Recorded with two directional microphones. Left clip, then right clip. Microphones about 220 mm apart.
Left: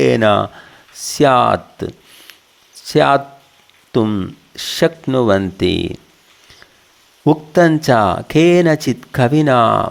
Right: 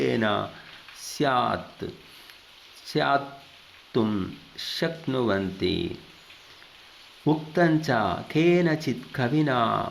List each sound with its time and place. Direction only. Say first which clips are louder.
0.0 s speech: left 13 dB; 50° left (ahead or behind)
7.3 s speech: left 11 dB; 50° left (ahead or behind)